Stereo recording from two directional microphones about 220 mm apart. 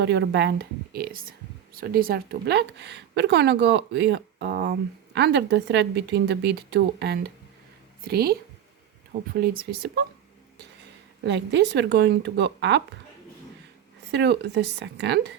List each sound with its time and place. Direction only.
0.0 s speech: 50° right (ahead or behind)
11.3 s speech: 50° right (ahead or behind)
14.1 s speech: 50° right (ahead or behind)